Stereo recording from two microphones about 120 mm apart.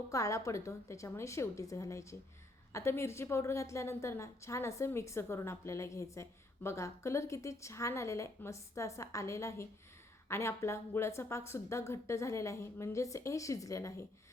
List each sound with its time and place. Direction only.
0.1 s a woman's voice: 25° left (ahead or behind)